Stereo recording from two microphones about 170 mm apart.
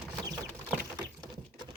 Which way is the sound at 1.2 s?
25° right (ahead or behind).